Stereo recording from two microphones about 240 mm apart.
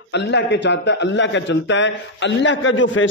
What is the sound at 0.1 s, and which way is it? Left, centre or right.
A man's voice, left.